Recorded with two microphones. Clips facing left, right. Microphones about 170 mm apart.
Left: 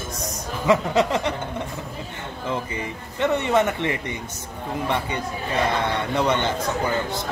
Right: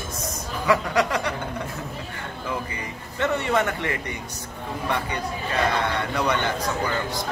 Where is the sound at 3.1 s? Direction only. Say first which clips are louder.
Left 3 dB; 20° left (ahead or behind).